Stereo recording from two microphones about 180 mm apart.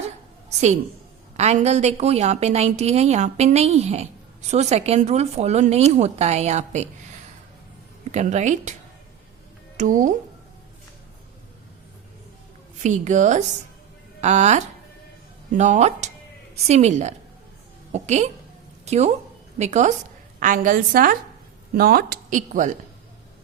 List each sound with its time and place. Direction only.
1.4 s a woman's voice: 40° right (ahead or behind)
8.1 s a woman's voice: 40° right (ahead or behind)
9.7 s a woman's voice: 45° right (ahead or behind)
12.8 s a woman's voice: 40° right (ahead or behind)